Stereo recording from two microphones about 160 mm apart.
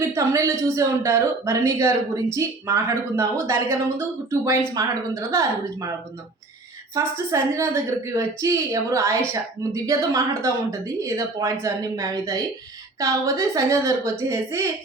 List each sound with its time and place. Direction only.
0.1 s a woman's voice: 15° right (ahead or behind)
6.9 s a woman's voice: 20° right (ahead or behind)